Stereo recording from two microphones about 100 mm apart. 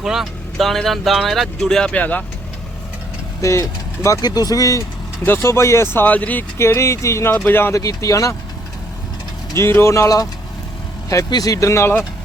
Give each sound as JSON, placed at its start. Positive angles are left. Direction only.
{"t": 0.0, "sound": "speech", "side_deg": -5}
{"t": 3.4, "sound": "speech", "side_deg": 30}
{"t": 5.2, "sound": "speech", "side_deg": 25}
{"t": 6.6, "sound": "speech", "side_deg": 30}
{"t": 7.8, "sound": "speech", "side_deg": 35}
{"t": 9.6, "sound": "speech", "side_deg": 25}
{"t": 11.3, "sound": "speech", "side_deg": 40}